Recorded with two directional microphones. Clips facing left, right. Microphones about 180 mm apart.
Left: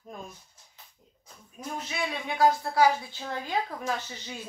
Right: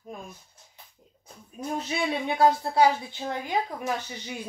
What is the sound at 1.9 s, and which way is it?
A woman's voice, 25° right (ahead or behind).